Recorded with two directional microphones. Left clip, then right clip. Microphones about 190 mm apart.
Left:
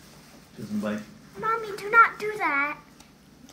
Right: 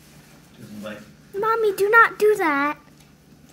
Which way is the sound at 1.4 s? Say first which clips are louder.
Right 8 dB; 65° right (ahead or behind).